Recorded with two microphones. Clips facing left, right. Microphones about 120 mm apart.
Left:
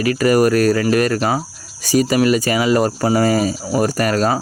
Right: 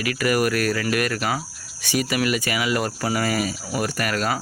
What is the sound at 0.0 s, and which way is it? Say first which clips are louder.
Speech: left 7 dB; 35° left (ahead or behind).